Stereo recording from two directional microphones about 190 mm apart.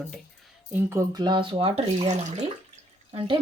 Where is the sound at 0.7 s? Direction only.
15° right (ahead or behind).